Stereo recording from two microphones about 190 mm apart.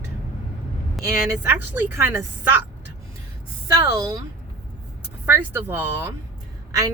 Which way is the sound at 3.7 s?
15° right (ahead or behind).